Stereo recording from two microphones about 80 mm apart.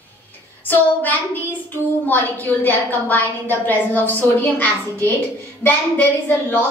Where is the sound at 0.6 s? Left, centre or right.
Left.